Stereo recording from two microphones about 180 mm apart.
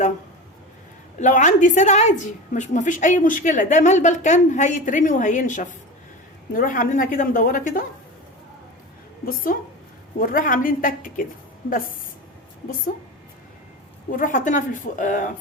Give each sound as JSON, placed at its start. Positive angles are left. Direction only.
{"t": 1.2, "sound": "a woman's voice", "side_deg": 45}
{"t": 9.2, "sound": "a woman's voice", "side_deg": 50}
{"t": 14.1, "sound": "a woman's voice", "side_deg": 45}